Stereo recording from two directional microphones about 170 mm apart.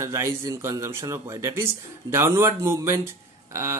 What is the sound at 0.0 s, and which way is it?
Speech, 15° right (ahead or behind).